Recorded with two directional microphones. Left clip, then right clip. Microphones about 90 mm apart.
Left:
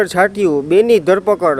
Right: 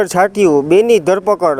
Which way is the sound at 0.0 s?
40° right (ahead or behind).